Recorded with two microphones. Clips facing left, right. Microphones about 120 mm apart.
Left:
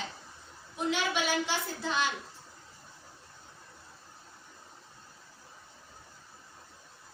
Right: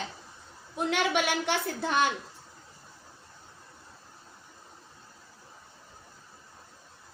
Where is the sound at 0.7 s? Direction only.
60° right (ahead or behind).